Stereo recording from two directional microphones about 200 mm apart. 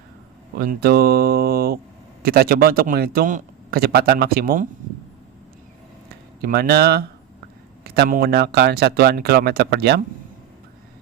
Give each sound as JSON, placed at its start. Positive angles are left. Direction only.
{"t": 0.6, "sound": "a man's voice", "side_deg": -45}
{"t": 6.4, "sound": "a man's voice", "side_deg": -50}